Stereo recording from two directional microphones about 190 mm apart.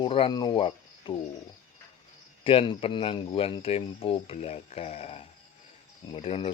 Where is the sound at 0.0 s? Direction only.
25° left (ahead or behind).